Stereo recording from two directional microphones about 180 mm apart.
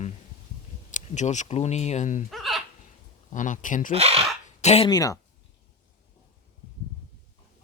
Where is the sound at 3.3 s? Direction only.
45° left (ahead or behind).